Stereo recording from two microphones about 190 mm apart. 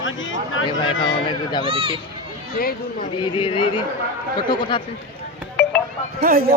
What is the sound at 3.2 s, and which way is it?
Speech, 25° left (ahead or behind).